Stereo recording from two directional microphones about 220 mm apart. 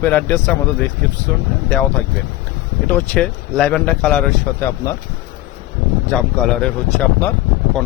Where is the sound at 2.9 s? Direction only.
5° left (ahead or behind).